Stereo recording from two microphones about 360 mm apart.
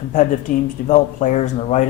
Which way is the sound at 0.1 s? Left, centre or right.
Left.